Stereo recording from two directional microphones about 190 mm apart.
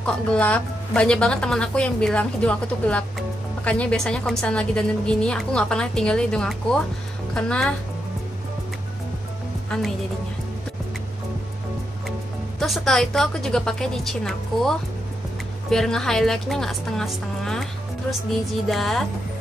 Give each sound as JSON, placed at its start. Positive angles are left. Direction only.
{"t": 0.0, "sound": "speech", "side_deg": 5}
{"t": 9.7, "sound": "speech", "side_deg": 0}
{"t": 12.5, "sound": "speech", "side_deg": 0}